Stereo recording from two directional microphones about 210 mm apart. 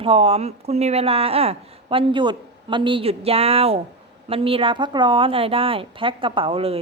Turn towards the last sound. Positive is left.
turn(degrees=-25)  # may be behind; listen again after turning